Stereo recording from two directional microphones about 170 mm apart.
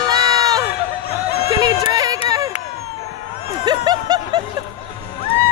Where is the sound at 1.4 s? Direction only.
20° right (ahead or behind).